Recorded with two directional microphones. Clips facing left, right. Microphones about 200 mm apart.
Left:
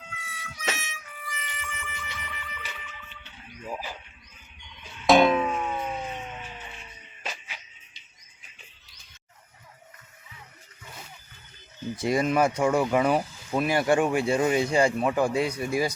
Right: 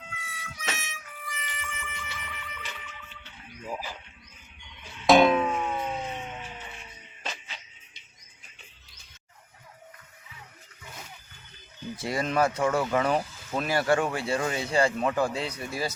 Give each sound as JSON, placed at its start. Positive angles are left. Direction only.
{"t": 0.0, "sound": "music", "side_deg": 0}
{"t": 5.0, "sound": "music", "side_deg": 0}
{"t": 7.3, "sound": "music", "side_deg": 10}
{"t": 11.9, "sound": "speech", "side_deg": 20}